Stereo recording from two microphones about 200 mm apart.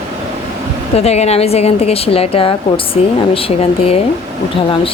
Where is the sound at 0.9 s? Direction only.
30° left (ahead or behind).